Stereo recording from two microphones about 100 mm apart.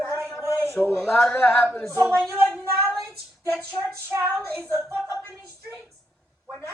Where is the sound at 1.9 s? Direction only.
25° right (ahead or behind).